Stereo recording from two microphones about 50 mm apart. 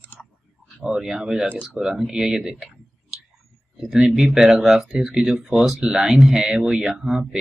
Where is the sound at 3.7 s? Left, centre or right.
Centre.